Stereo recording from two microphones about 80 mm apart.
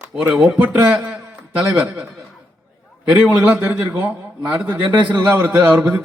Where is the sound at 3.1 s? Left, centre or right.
Centre.